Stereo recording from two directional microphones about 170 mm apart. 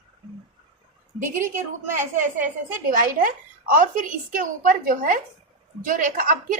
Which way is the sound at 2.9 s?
55° right (ahead or behind).